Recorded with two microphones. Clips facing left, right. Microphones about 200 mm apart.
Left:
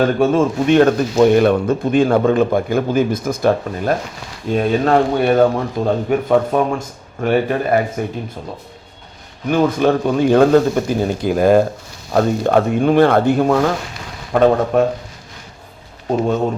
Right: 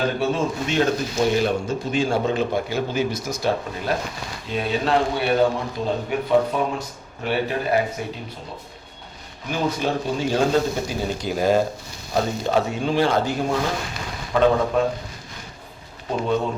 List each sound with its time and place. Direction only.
0.0 s speech: 50° left (ahead or behind)
9.5 s speech: 55° left (ahead or behind)